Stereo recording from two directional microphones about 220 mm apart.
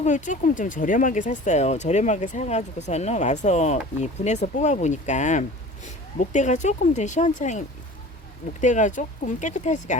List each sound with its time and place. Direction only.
0.0 s speech: 35° left (ahead or behind)
8.6 s speech: 35° left (ahead or behind)